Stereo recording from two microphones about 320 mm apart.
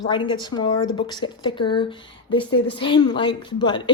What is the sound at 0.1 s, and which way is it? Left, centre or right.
Speech, centre.